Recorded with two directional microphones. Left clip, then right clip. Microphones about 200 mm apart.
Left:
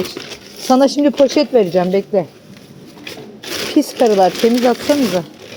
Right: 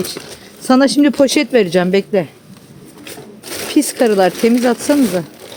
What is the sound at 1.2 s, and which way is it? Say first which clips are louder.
Speech: left 3 dB; 45° right (ahead or behind).